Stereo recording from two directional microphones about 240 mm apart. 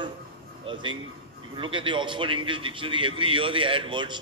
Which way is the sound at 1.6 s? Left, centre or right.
Right.